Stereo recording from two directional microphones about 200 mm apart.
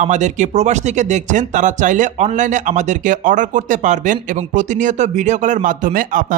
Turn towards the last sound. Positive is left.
turn(degrees=-40)  # may be behind; listen again after turning